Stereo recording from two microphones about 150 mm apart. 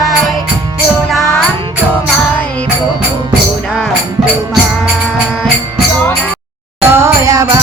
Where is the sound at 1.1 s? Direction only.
Centre (ahead or behind).